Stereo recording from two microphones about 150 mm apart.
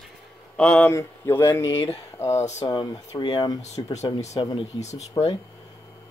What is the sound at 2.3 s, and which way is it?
Speech, 45° left (ahead or behind).